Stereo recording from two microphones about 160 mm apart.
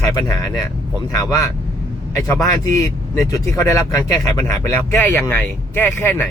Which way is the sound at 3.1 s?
20° left (ahead or behind).